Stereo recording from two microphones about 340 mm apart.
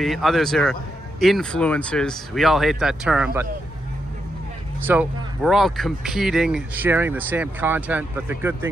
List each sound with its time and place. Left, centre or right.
0.0 s speech: centre
4.8 s speech: centre